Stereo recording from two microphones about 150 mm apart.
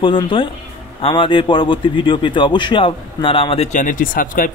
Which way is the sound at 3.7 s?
65° left (ahead or behind).